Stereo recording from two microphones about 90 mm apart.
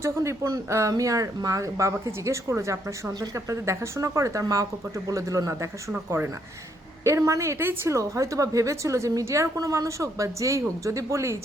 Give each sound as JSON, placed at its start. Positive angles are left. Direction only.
{"t": 0.0, "sound": "a woman's voice", "side_deg": -30}